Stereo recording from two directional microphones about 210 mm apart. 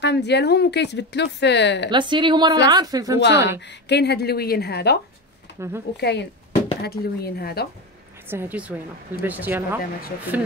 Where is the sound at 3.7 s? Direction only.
50° left (ahead or behind).